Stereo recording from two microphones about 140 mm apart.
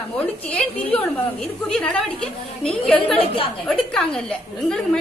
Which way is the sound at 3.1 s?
40° left (ahead or behind).